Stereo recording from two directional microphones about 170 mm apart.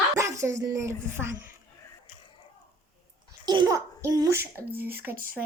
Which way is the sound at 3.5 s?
20° right (ahead or behind).